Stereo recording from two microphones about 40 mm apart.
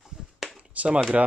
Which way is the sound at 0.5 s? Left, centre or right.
Right.